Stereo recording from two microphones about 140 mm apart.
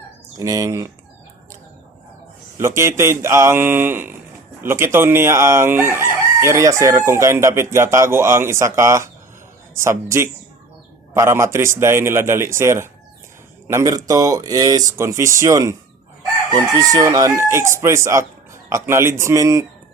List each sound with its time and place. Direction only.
0.3 s chicken: 25° right (ahead or behind)
2.6 s chicken: 20° right (ahead or behind)